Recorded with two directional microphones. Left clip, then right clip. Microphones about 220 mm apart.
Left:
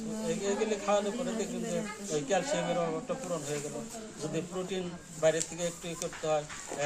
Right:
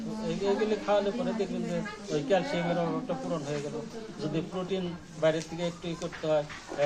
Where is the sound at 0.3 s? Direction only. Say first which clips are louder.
Right 3 dB; 10° left (ahead or behind).